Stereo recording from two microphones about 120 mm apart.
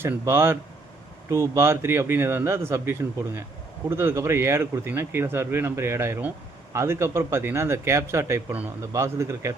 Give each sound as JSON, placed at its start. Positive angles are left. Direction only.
{"t": 0.0, "sound": "speech", "side_deg": -20}